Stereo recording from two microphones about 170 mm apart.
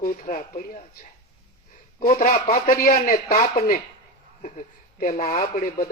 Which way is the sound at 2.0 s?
55° left (ahead or behind).